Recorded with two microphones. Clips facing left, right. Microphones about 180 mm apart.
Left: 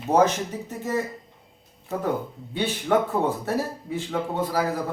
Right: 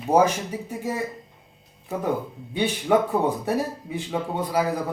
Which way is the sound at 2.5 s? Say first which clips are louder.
Right 2 dB; 15° right (ahead or behind).